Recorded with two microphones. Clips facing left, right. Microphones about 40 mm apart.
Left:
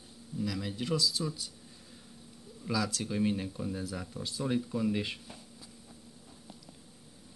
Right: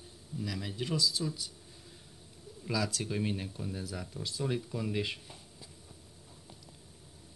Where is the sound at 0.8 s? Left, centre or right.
Centre.